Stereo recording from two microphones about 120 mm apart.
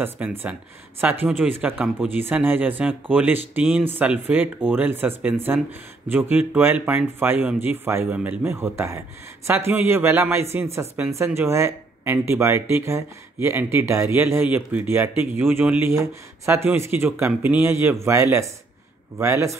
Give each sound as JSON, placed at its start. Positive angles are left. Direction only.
{"t": 0.0, "sound": "speech", "side_deg": -15}